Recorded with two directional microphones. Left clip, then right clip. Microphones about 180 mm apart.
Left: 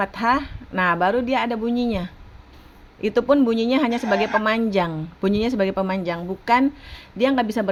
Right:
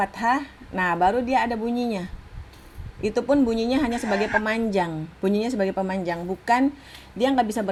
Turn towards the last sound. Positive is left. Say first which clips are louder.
# left 2 dB
turn(degrees=45)  # may be behind; listen again after turning